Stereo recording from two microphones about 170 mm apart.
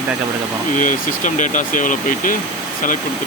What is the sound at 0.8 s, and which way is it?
Speech, 50° left (ahead or behind).